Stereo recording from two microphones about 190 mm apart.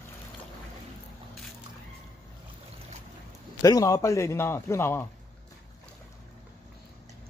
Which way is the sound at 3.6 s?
15° left (ahead or behind).